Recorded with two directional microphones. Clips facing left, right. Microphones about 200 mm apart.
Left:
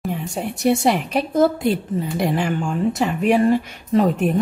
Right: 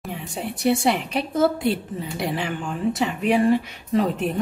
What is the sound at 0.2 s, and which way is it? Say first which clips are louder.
A woman's voice: left 1 dB; 45° left (ahead or behind).